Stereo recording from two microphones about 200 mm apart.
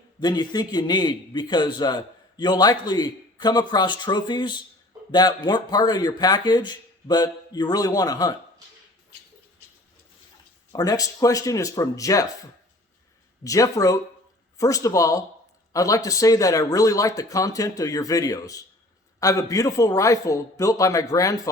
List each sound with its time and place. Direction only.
0.2 s a man's voice: 20° left (ahead or behind)
10.7 s speech: 20° left (ahead or behind)
13.4 s speech: 15° left (ahead or behind)